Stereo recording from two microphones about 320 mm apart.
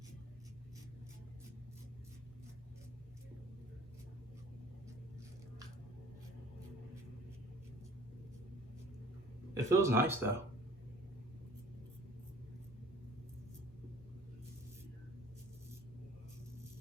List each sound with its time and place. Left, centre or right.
9.6 s speech: centre